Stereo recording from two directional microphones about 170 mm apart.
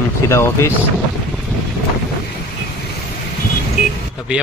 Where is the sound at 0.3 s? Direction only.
15° left (ahead or behind).